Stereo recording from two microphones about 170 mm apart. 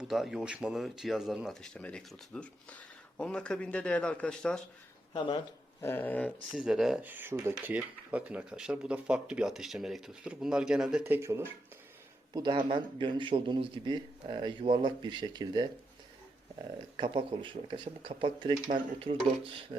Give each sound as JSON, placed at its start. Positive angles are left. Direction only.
{"t": 0.0, "sound": "speech", "side_deg": 0}
{"t": 5.1, "sound": "speech", "side_deg": 30}
{"t": 5.8, "sound": "speech", "side_deg": 10}
{"t": 6.6, "sound": "speech", "side_deg": 0}
{"t": 12.3, "sound": "speech", "side_deg": -25}
{"t": 17.0, "sound": "speech", "side_deg": -30}